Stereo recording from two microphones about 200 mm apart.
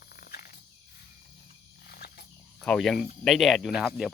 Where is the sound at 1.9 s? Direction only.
50° left (ahead or behind).